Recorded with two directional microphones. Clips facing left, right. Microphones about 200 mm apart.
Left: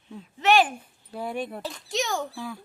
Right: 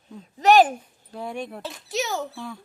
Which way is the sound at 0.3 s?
40° right (ahead or behind).